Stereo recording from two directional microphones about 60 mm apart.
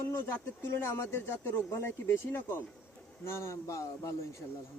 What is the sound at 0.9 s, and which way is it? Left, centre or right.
Speech, left.